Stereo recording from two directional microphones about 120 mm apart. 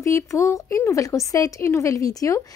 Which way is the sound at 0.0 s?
25° left (ahead or behind).